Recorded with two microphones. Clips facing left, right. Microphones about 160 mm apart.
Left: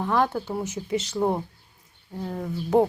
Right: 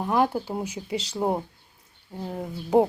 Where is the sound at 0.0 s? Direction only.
15° right (ahead or behind).